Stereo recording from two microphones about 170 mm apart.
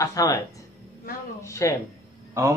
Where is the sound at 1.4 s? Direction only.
15° left (ahead or behind).